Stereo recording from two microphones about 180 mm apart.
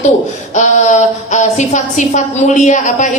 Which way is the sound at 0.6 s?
40° left (ahead or behind).